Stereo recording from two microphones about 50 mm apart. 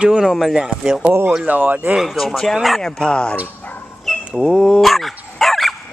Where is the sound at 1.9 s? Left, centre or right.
Centre.